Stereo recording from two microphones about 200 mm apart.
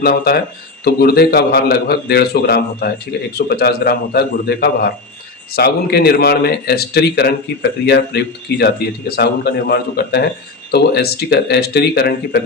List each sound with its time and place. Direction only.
0.0 s speech: 50° left (ahead or behind)